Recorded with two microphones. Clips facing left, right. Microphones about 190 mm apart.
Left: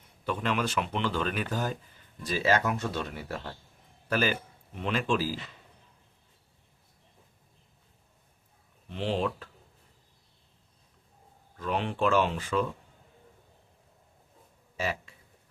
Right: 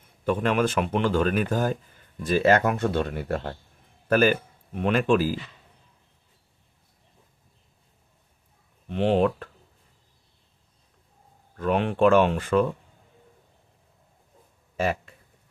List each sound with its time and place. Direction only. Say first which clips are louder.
0.3 s speech: right 7 dB; 50° right (ahead or behind)
8.9 s speech: right 8 dB; 60° right (ahead or behind)
11.5 s speech: right 7 dB; 55° right (ahead or behind)
14.8 s speech: right 7 dB; 50° right (ahead or behind)